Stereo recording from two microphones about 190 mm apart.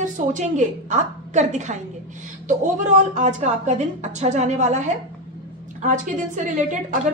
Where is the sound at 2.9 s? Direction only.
40° right (ahead or behind).